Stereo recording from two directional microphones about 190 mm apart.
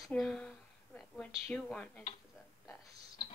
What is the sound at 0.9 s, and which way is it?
A woman's voice, 5° left (ahead or behind).